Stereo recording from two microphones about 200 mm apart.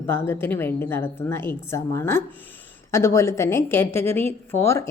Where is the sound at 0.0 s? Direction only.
10° left (ahead or behind).